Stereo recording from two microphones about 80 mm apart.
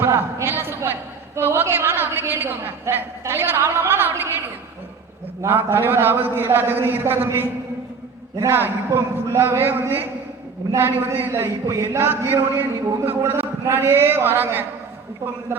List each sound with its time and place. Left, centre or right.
0.0 s a sound: right
1.4 s a woman's voice: right
5.4 s a woman's voice: right